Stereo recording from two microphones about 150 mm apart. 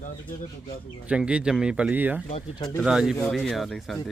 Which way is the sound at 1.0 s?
5° right (ahead or behind).